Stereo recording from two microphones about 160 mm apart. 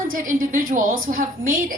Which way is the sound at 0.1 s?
60° right (ahead or behind).